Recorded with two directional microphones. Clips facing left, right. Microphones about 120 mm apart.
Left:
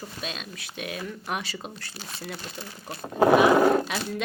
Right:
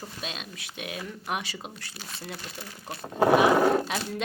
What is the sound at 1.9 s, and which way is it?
Speech, 30° left (ahead or behind).